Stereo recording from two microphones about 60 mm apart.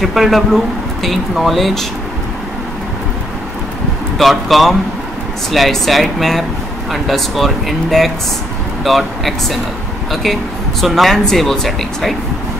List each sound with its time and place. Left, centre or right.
0.0 s speech: centre
4.2 s speech: centre